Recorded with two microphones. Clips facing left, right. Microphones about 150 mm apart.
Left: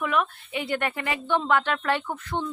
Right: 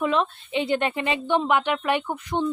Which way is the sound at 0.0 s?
25° right (ahead or behind).